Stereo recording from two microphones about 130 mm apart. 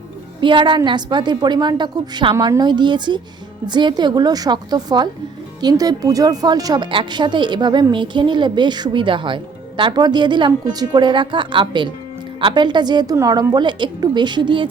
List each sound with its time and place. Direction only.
0.4 s a woman's voice: 40° right (ahead or behind)